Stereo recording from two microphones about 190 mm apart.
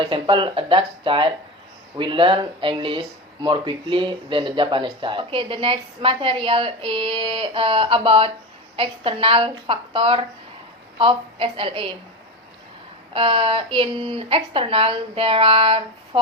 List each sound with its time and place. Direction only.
0.0 s speech: 25° right (ahead or behind)
13.1 s speech: 30° right (ahead or behind)